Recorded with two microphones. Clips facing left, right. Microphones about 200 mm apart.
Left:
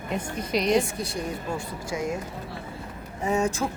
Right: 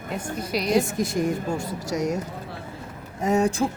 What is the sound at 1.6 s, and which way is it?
Speech, 40° right (ahead or behind).